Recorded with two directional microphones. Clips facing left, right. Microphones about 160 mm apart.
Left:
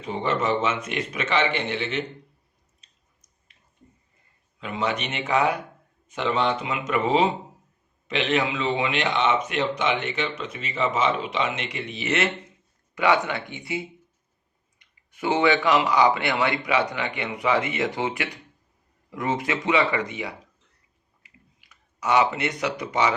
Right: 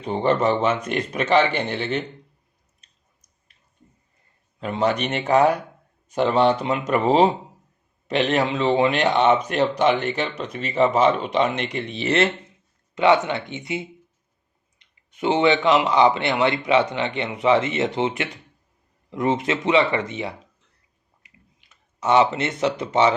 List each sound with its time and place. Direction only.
0.0 s speech: 35° right (ahead or behind)
4.6 s a man's voice: 40° right (ahead or behind)
21.2 s a sound: 25° right (ahead or behind)